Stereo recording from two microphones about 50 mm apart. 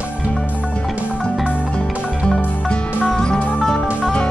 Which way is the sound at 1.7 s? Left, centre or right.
Centre.